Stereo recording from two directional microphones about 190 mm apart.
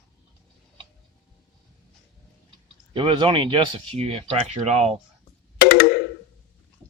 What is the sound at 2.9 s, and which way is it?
Speech, 25° right (ahead or behind).